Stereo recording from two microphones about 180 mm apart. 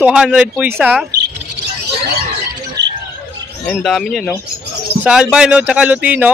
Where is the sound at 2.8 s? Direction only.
70° right (ahead or behind).